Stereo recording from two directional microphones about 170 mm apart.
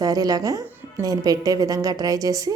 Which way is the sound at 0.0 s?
20° right (ahead or behind).